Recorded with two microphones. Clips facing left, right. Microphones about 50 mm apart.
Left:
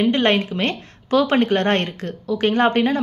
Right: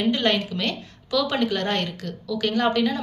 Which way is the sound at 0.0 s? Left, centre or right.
Left.